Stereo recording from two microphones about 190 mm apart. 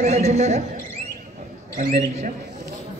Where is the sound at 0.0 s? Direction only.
35° right (ahead or behind).